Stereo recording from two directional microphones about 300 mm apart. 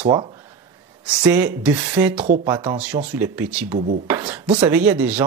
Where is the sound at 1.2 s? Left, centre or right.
Centre.